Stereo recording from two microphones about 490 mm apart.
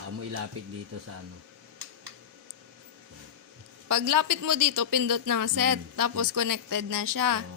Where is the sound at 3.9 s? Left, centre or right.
Right.